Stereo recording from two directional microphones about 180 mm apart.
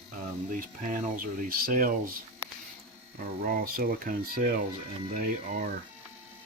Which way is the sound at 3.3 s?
50° right (ahead or behind).